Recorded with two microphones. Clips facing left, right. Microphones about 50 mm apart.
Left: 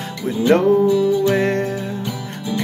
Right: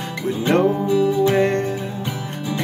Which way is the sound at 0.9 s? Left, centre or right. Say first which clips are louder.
Left 1 dB; right.